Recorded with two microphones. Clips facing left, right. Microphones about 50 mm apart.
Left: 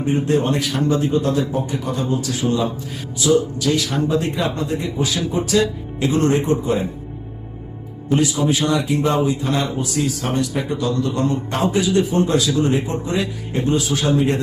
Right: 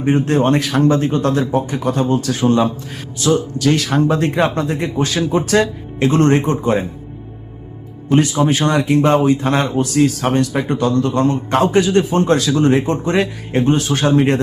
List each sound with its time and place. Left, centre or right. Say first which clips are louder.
0.0 s a man's voice: right 4 dB; right
8.1 s a man's voice: right 4 dB; right